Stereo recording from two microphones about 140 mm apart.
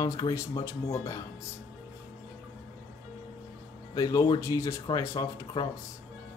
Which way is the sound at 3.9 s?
25° left (ahead or behind).